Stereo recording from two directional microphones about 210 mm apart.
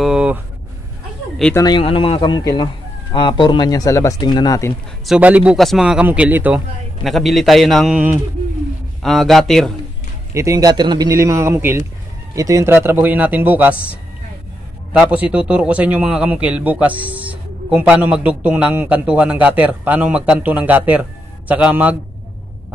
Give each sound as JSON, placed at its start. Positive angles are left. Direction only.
{"t": 0.0, "sound": "a sound", "side_deg": -5}
{"t": 1.4, "sound": "speech", "side_deg": 15}
{"t": 5.0, "sound": "speech", "side_deg": -5}
{"t": 10.3, "sound": "a man's voice", "side_deg": -15}